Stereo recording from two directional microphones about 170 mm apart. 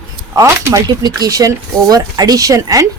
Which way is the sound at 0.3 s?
20° right (ahead or behind).